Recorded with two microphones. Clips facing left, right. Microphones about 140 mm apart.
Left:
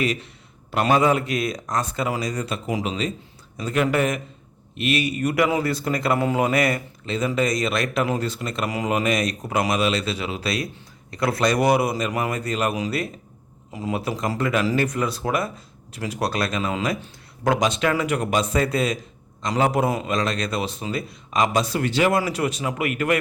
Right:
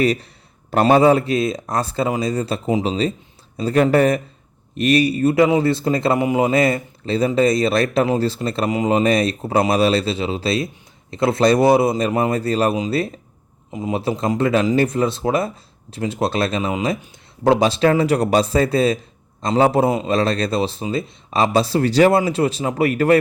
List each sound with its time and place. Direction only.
0.0 s a man's voice: 35° right (ahead or behind)
22.2 s speech: 30° right (ahead or behind)